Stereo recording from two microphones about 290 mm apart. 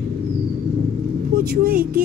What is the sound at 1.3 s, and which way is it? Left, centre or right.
Speech, right.